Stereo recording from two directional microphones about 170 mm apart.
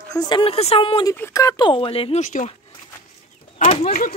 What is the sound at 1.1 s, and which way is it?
Speech, 15° left (ahead or behind).